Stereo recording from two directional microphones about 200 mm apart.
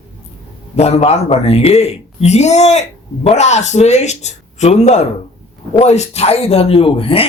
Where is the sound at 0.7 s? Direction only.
30° left (ahead or behind).